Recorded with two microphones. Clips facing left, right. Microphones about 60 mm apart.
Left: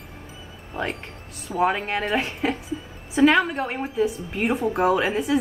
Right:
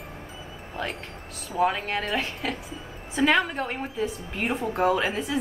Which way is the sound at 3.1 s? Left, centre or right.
Centre.